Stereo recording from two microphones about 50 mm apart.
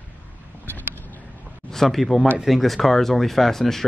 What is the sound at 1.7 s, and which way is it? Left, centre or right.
Speech, centre.